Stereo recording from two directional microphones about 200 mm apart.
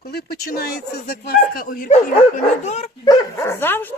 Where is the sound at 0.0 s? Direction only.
50° left (ahead or behind); by 2.9 s 35° left (ahead or behind).